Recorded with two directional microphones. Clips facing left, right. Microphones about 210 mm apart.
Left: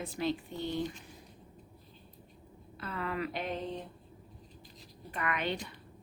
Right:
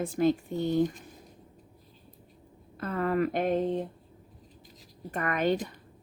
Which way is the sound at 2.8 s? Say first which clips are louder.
Right 9 dB; 45° right (ahead or behind).